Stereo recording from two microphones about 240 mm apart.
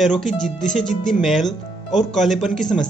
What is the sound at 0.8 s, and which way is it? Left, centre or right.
Speech, left.